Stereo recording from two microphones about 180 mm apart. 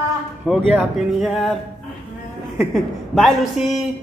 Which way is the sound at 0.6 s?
5° right (ahead or behind).